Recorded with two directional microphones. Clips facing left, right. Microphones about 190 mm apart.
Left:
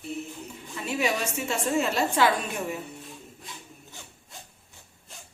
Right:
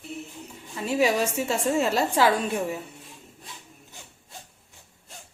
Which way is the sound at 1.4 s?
35° right (ahead or behind).